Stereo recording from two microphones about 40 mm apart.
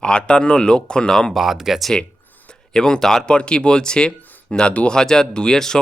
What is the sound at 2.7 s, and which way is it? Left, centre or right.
Speech, centre.